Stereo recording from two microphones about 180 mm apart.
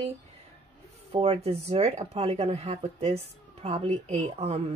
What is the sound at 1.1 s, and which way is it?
Speech, 35° right (ahead or behind).